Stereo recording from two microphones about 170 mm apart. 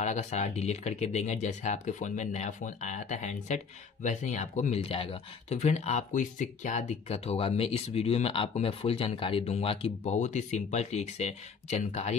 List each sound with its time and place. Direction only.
0.0 s speech: 45° left (ahead or behind)